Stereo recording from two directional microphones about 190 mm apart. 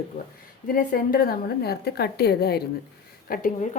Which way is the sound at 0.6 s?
50° left (ahead or behind).